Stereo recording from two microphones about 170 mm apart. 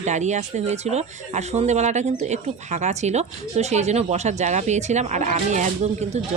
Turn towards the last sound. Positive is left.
turn(degrees=-40)  # may be behind; listen again after turning